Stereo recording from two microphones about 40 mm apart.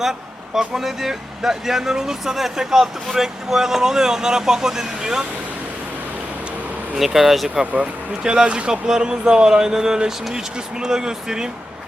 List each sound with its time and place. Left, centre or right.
0.0 s vehicle: centre
0.7 s speech: centre
6.9 s speech: centre